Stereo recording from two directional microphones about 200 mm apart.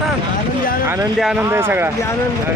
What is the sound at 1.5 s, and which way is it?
Speech, 10° right (ahead or behind).